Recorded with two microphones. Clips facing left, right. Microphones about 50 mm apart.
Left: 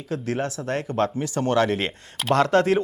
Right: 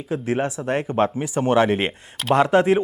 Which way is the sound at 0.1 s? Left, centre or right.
Centre.